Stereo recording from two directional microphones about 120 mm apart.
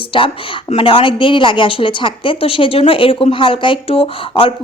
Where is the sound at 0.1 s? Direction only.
45° left (ahead or behind).